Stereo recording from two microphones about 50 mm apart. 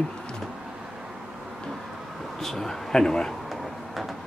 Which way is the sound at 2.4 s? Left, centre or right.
Centre.